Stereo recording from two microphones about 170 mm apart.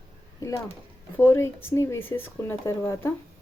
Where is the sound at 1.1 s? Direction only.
15° left (ahead or behind).